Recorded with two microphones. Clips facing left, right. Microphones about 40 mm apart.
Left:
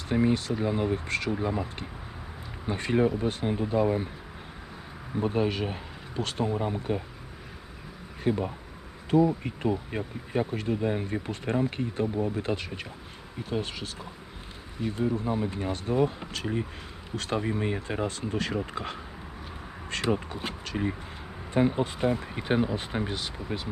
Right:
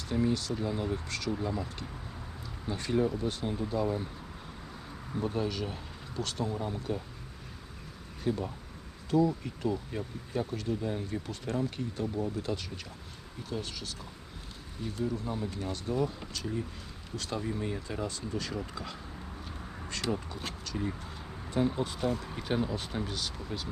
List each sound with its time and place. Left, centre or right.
0.1 s bee: left
5.2 s bee: left
8.2 s bee: left
14.8 s speech: left
16.3 s bee: left
21.5 s speech: left